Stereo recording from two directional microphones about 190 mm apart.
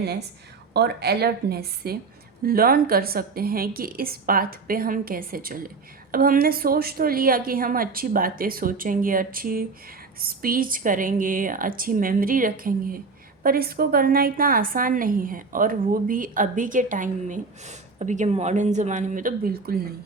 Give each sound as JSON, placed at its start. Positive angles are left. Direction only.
{"t": 0.0, "sound": "a woman's voice", "side_deg": -60}